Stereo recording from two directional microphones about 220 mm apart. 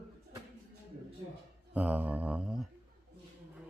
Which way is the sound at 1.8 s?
5° right (ahead or behind).